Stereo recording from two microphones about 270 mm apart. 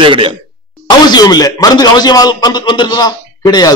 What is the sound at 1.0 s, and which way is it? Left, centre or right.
A man's voice, centre.